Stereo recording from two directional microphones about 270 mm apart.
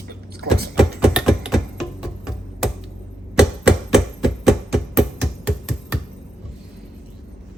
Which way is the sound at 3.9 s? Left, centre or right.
Centre.